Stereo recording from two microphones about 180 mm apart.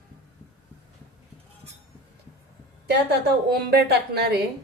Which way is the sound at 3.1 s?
60° right (ahead or behind).